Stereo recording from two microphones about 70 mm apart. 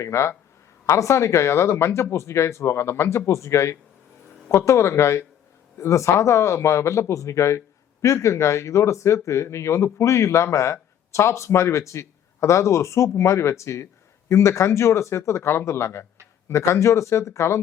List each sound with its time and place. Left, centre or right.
0.0 s speech: left